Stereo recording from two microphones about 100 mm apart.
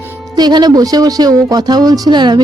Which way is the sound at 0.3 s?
45° right (ahead or behind).